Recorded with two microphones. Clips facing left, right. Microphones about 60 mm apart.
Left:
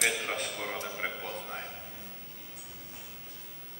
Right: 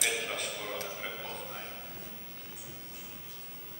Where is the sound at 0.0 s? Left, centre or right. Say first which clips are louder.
Left 3 dB; left.